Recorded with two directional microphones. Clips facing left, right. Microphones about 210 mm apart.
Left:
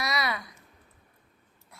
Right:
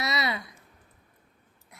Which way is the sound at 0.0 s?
25° right (ahead or behind).